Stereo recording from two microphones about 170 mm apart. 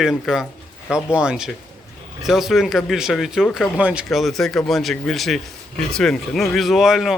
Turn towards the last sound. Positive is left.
turn(degrees=0)  # may be behind; listen again after turning